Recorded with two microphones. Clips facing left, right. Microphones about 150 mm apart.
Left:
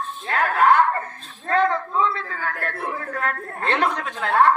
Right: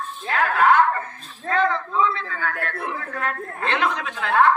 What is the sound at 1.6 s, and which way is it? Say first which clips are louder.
Speech: even; 40° left (ahead or behind).